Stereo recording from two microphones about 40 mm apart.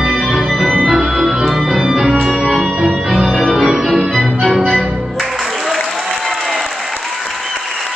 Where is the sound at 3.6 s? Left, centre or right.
Centre.